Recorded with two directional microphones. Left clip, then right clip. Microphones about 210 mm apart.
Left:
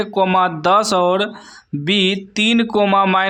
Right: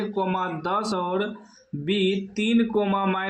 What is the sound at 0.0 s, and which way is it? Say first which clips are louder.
Speech: left 11 dB; 40° left (ahead or behind).